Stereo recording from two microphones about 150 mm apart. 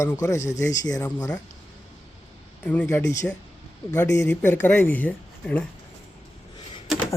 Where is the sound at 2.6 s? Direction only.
10° left (ahead or behind).